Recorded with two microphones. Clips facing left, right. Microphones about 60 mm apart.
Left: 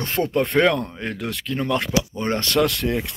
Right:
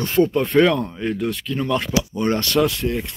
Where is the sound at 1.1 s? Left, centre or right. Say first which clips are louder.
Right 5 dB; left.